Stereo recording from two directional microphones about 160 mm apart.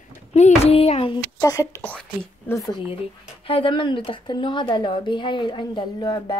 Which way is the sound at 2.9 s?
35° left (ahead or behind).